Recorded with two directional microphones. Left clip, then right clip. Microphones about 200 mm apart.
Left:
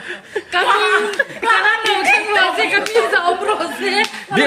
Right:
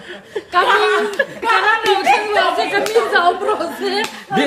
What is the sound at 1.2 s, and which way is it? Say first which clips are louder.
Chuckle: even; 15° left (ahead or behind).